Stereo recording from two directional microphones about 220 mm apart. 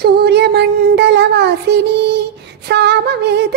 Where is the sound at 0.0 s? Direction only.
45° right (ahead or behind).